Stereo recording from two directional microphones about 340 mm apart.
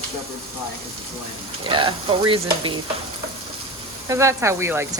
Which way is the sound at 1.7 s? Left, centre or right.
Centre.